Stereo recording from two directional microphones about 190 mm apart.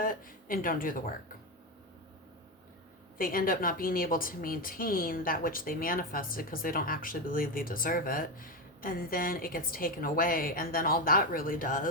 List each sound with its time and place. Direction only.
0.0 s speech: 45° left (ahead or behind)
3.2 s speech: 50° left (ahead or behind)